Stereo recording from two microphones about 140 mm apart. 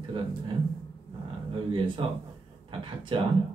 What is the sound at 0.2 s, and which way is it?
Speech, 40° right (ahead or behind).